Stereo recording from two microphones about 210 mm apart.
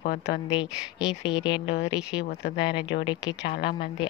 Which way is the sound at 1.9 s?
20° left (ahead or behind).